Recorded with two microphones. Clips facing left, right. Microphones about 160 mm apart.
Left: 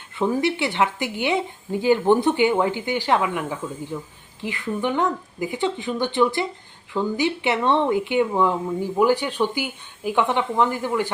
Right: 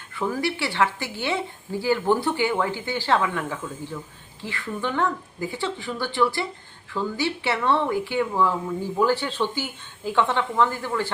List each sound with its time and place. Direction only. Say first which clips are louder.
0.2 s speech: left 4 dB; 20° left (ahead or behind)